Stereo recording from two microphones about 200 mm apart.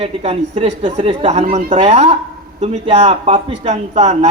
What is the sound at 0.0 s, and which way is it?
Speech, 30° right (ahead or behind).